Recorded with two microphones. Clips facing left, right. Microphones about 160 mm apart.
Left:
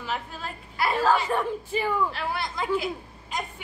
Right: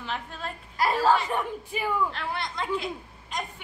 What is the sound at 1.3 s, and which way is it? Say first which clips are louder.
Speech: left 3 dB; 15° right (ahead or behind).